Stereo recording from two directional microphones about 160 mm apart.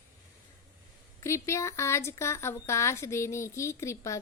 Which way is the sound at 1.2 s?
20° left (ahead or behind).